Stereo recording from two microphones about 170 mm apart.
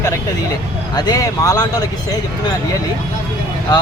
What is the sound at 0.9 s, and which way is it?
Speech, 25° left (ahead or behind).